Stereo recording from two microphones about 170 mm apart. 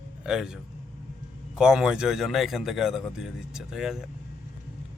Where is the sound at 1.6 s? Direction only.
5° right (ahead or behind).